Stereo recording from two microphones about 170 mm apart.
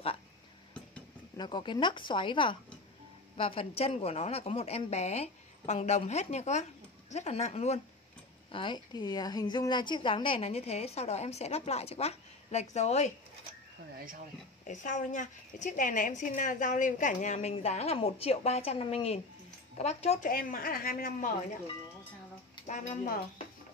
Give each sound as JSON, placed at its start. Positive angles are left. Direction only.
{"t": 1.3, "sound": "a woman's voice", "side_deg": 25}
{"t": 8.5, "sound": "a woman's voice", "side_deg": 30}
{"t": 14.7, "sound": "a woman's voice", "side_deg": 45}
{"t": 20.2, "sound": "speech", "side_deg": 55}
{"t": 22.7, "sound": "a woman's voice", "side_deg": 50}